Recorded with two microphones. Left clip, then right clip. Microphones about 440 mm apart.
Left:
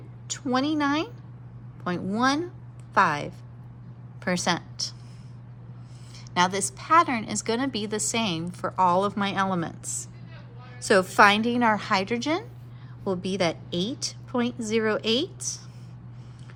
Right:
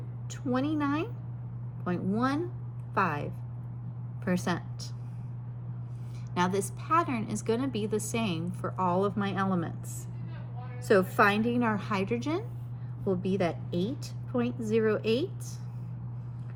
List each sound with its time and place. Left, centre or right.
0.5 s a woman's voice: left
6.3 s a woman's voice: centre